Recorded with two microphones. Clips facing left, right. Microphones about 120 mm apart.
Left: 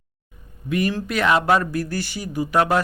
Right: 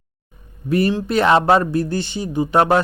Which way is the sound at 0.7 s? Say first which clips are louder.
Right 5 dB; 35° right (ahead or behind).